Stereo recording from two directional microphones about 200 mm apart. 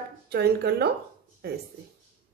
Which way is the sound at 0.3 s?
55° right (ahead or behind).